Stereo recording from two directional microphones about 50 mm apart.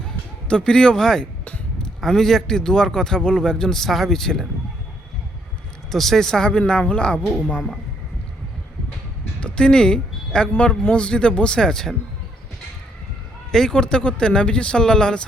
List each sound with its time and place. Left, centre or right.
0.4 s a man's voice: centre
5.9 s a man's voice: centre
9.4 s a man's voice: centre
13.5 s a man's voice: centre